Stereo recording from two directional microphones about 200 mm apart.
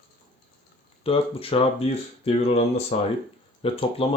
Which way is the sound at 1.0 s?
30° left (ahead or behind).